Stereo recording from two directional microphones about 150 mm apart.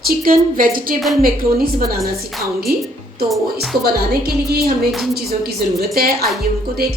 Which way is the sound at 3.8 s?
90° right.